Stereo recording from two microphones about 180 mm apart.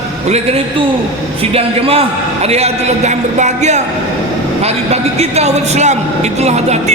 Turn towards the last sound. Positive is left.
turn(degrees=-40)  # may be behind; listen again after turning